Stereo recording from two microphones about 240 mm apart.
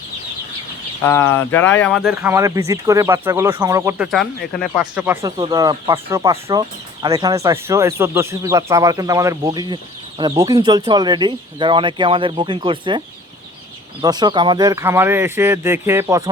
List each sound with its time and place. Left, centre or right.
1.0 s speech: centre; by 13.0 s right
14.0 s speech: centre